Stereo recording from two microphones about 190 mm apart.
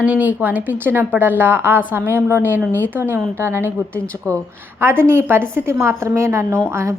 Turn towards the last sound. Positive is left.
turn(degrees=-15)  # may be behind; listen again after turning